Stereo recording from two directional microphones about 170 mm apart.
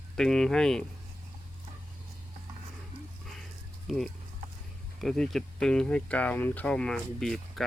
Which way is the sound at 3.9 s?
Centre (ahead or behind).